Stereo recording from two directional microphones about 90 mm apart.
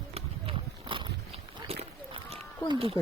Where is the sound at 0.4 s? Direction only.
80° right.